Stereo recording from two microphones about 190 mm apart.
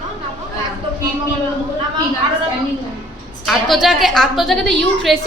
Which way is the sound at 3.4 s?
Centre (ahead or behind).